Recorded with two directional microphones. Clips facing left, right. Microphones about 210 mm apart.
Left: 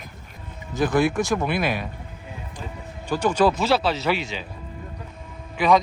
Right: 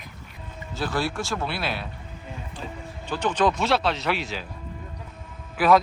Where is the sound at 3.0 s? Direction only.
10° left (ahead or behind).